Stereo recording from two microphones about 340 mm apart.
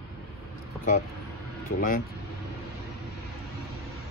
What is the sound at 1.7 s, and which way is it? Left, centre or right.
Speech, left.